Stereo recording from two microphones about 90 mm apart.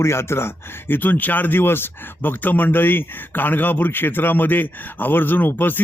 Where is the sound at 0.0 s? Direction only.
30° left (ahead or behind).